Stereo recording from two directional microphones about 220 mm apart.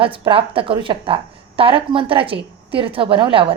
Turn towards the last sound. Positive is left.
turn(degrees=-25)  # may be behind; listen again after turning